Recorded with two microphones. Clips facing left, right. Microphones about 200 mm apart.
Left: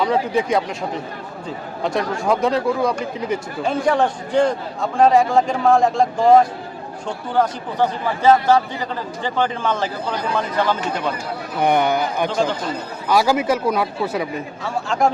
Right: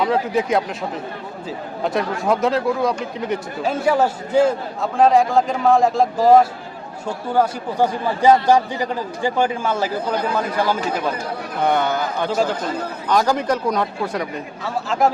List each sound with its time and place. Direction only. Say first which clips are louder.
0.0 s a man's voice: even; centre (ahead or behind)
11.6 s a man's voice: left 2 dB; 15° left (ahead or behind); by 15.1 s 5° right (ahead or behind)